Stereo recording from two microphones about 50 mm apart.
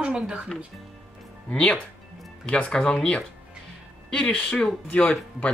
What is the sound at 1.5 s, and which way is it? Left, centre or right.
Speech, centre.